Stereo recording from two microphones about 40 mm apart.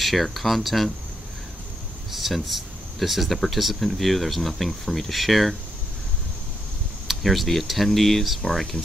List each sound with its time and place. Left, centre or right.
0.0 s speech: centre
2.1 s speech: centre
7.1 s speech: centre